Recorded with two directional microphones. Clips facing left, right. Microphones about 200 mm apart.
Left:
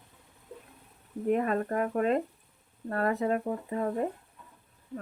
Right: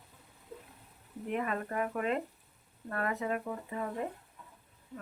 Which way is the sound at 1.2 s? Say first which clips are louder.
Left 7 dB; 40° left (ahead or behind).